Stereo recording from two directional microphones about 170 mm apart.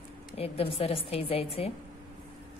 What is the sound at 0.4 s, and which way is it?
Speech, 35° left (ahead or behind).